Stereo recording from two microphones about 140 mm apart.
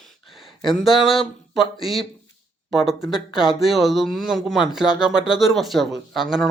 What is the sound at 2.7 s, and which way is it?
Speech, 5° right (ahead or behind).